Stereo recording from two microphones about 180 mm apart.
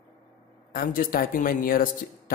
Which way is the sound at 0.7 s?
50° left (ahead or behind).